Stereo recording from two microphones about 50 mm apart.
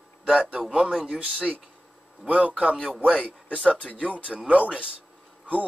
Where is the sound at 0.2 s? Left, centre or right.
Right.